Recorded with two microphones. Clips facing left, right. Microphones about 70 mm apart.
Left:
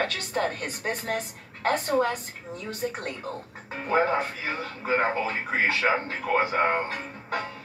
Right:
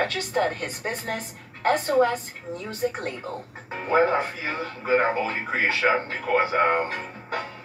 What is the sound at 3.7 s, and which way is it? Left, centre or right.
Speech, right.